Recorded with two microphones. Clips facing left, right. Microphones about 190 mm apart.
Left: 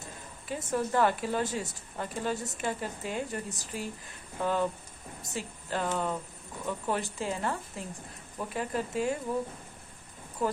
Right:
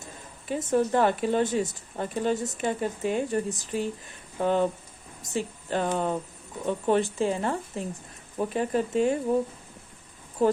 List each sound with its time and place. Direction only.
0.4 s speech: 20° right (ahead or behind)
10.4 s speech: 30° right (ahead or behind)